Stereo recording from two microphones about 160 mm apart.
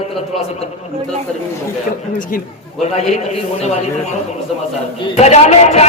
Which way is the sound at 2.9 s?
45° left (ahead or behind).